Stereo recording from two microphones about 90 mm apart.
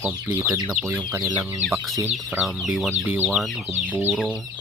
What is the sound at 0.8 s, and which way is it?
Speech, 15° right (ahead or behind).